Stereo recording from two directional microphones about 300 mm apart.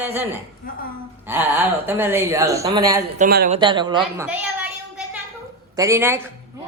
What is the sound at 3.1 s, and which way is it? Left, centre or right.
Speech, right.